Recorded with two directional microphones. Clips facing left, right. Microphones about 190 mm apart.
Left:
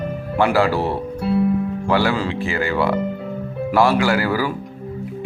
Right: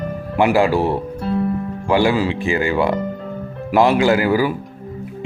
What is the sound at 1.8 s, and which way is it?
Speech, 15° right (ahead or behind).